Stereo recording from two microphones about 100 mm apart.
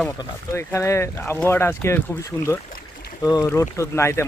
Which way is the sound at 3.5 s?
30° left (ahead or behind).